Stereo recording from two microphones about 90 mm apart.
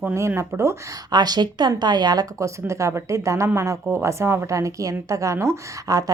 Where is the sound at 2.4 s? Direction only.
35° right (ahead or behind).